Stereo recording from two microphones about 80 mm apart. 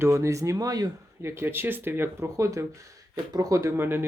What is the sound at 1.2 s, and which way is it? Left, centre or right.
Speech, right.